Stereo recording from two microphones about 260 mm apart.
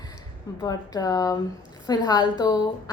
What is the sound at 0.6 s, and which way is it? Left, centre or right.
A woman's voice, centre.